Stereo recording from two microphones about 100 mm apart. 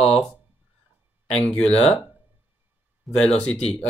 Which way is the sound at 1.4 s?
10° left (ahead or behind).